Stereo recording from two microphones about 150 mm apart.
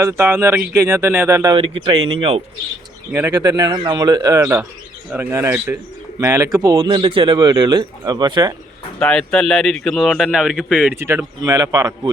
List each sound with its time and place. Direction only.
0.0 s speech: 20° right (ahead or behind)
1.5 s speech: 35° right (ahead or behind)
3.1 s speech: 15° right (ahead or behind)
3.3 s speech: 25° right (ahead or behind)
6.7 s speech: 35° right (ahead or behind)
9.0 s a man's voice: 5° left (ahead or behind)
10.9 s speech: 15° right (ahead or behind)